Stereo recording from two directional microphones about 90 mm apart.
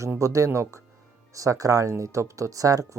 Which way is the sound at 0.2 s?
35° right (ahead or behind).